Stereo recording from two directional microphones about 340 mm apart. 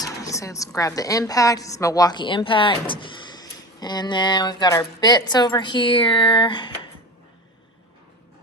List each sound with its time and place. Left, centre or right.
0.0 s a woman's voice: centre